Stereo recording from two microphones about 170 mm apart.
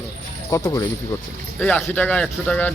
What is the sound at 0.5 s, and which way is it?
A man's voice, 20° left (ahead or behind).